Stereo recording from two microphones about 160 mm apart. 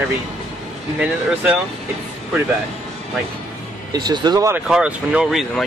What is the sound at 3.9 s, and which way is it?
Speech, 25° right (ahead or behind).